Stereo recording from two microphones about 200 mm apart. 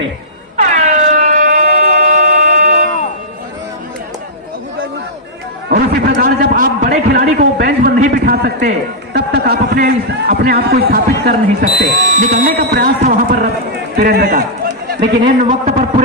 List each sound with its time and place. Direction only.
0.5 s air horn: 35° right (ahead or behind)
5.7 s a man's voice: 45° right (ahead or behind)
11.8 s a sound: 40° right (ahead or behind)
13.9 s run: 50° right (ahead or behind)
14.8 s a man's voice: 40° right (ahead or behind)